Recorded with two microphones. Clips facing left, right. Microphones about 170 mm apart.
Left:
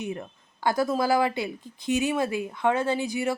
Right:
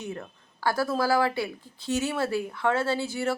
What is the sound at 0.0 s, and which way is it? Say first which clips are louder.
Speech: left 3 dB; 15° left (ahead or behind).